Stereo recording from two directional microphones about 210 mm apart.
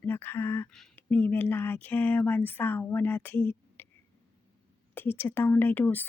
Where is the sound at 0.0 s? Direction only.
10° left (ahead or behind).